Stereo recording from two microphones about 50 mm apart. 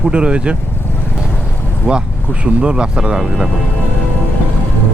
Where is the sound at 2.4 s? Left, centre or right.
Right.